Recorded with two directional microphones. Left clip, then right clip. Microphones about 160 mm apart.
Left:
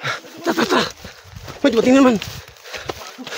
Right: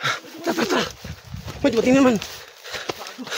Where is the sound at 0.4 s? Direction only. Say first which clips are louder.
Left 6 dB; 25° left (ahead or behind).